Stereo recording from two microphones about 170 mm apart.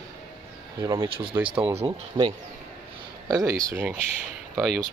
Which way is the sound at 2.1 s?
30° right (ahead or behind).